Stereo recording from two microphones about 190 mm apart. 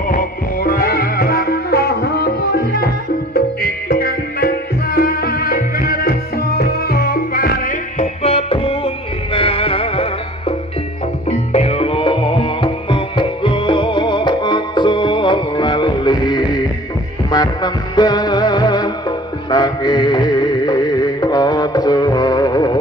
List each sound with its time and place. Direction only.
0.1 s music: 50° left (ahead or behind)
8.0 s music: 35° left (ahead or behind)
11.2 s music: 35° left (ahead or behind)